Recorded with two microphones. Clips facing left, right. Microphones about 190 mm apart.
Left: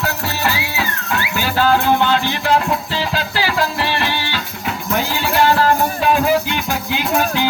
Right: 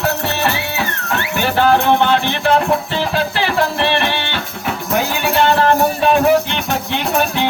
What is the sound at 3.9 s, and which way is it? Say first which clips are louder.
Music: right 3 dB; 60° right (ahead or behind).